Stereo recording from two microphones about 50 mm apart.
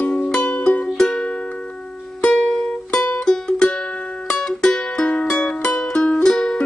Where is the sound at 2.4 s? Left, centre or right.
Centre.